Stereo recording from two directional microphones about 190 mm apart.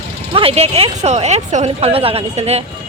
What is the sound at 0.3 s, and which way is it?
Speech, 30° right (ahead or behind).